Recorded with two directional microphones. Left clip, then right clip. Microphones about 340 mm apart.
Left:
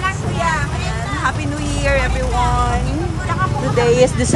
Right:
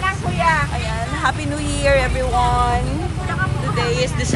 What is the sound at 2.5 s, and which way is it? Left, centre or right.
Speech, centre.